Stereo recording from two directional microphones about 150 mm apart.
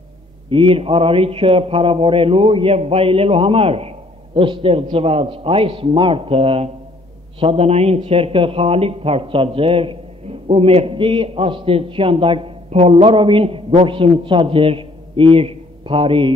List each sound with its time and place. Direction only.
0.5 s a man's voice: 35° right (ahead or behind)